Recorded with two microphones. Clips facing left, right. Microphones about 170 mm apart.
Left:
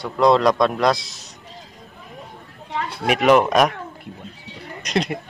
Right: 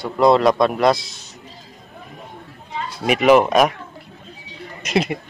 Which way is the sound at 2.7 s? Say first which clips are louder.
Left 2 dB; 60° left (ahead or behind).